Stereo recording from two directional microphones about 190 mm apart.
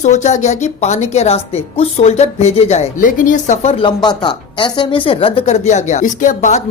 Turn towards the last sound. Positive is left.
turn(degrees=40)  # may be behind; listen again after turning